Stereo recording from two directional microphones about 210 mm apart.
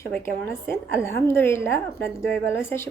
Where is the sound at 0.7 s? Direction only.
10° left (ahead or behind).